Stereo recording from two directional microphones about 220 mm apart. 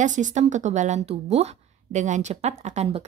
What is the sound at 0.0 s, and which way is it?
A woman's voice, 35° right (ahead or behind).